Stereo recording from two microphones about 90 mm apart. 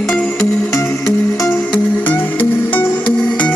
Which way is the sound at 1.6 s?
15° left (ahead or behind).